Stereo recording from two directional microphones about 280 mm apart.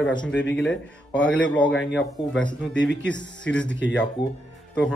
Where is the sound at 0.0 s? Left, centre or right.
Centre.